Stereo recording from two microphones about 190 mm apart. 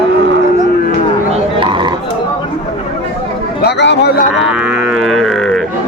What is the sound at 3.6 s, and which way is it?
Speech, 65° left (ahead or behind).